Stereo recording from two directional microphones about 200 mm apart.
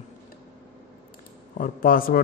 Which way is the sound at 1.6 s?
45° left (ahead or behind).